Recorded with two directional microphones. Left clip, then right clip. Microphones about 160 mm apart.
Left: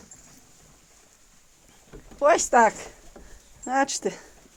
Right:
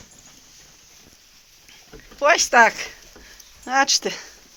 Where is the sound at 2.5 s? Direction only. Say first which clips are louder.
Right 4 dB; 20° left (ahead or behind).